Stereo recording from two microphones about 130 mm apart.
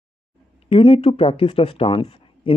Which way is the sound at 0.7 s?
45° left (ahead or behind).